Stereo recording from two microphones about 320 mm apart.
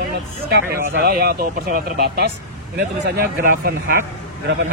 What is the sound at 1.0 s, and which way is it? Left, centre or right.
Speech, right.